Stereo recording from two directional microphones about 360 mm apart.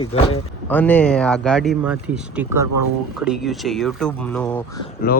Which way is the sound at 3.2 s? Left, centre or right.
Centre.